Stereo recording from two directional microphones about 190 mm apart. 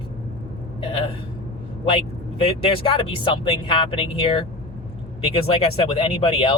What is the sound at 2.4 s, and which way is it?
Speech, 30° left (ahead or behind).